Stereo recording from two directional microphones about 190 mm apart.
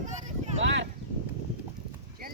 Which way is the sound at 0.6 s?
70° right (ahead or behind).